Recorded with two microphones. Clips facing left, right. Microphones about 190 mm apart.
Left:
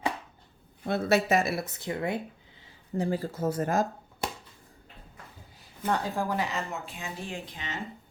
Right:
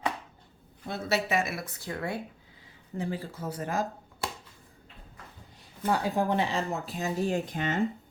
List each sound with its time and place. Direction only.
0.9 s speech: 55° left (ahead or behind); by 2.2 s 20° left (ahead or behind)
3.0 s speech: 40° left (ahead or behind)
5.8 s a woman's voice: 10° right (ahead or behind); by 7.8 s 50° right (ahead or behind)